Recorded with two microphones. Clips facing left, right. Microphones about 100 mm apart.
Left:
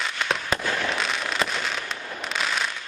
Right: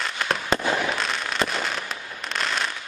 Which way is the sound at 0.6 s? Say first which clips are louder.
Right 3 dB; 15° right (ahead or behind).